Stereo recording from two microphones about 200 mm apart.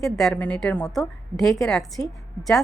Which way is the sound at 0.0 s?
Centre (ahead or behind).